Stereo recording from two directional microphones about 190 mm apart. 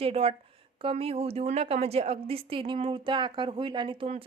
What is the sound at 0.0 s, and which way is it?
A woman's voice, 30° right (ahead or behind).